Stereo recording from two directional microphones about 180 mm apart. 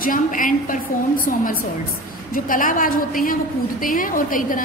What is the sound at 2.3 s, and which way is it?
A woman's voice, 50° left (ahead or behind).